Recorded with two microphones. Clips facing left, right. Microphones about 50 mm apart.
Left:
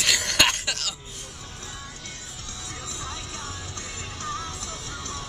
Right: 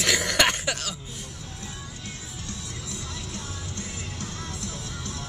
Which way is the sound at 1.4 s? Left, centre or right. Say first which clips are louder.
Even; left.